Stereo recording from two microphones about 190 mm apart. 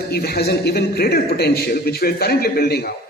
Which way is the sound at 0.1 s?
55° left (ahead or behind).